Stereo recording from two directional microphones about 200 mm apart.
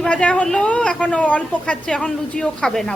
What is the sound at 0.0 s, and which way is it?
A woman's voice, 5° left (ahead or behind).